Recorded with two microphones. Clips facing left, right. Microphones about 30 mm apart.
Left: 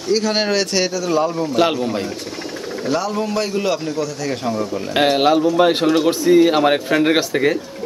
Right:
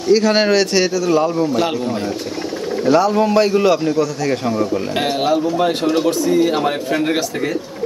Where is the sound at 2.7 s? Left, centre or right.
Centre.